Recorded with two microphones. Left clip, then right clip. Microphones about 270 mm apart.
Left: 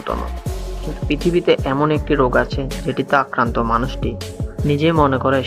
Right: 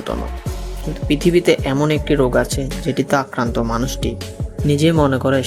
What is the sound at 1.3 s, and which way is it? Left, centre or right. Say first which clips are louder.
Speech: right 1 dB; right.